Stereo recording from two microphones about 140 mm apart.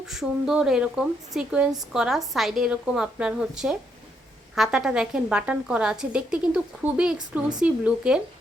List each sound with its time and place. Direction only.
0.0 s a woman's voice: 5° right (ahead or behind)